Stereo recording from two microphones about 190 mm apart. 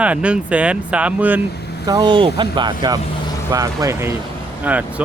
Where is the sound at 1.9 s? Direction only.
25° right (ahead or behind).